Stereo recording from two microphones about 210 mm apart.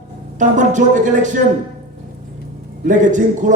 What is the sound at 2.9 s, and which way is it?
Speech, 35° right (ahead or behind).